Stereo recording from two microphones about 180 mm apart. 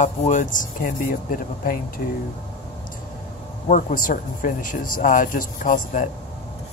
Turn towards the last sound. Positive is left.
turn(degrees=45)  # may be behind; listen again after turning